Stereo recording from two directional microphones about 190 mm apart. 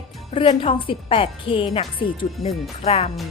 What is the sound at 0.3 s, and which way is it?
A woman's voice, 30° left (ahead or behind).